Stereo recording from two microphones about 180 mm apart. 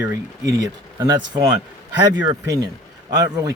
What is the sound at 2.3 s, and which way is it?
Speech, 20° right (ahead or behind).